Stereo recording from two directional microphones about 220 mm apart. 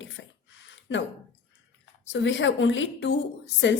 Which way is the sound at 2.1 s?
55° left (ahead or behind).